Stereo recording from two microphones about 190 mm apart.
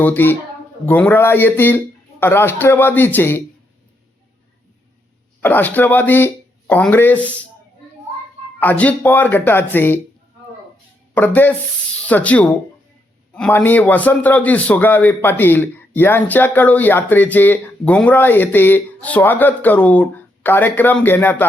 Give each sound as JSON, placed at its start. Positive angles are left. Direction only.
{"t": 0.0, "sound": "a man's voice", "side_deg": 10}
{"t": 5.4, "sound": "speech", "side_deg": 10}
{"t": 8.6, "sound": "a man's voice", "side_deg": 5}
{"t": 11.1, "sound": "a man's voice", "side_deg": 10}